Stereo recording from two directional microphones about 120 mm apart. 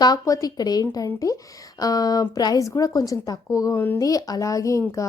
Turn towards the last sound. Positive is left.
turn(degrees=25)  # may be behind; listen again after turning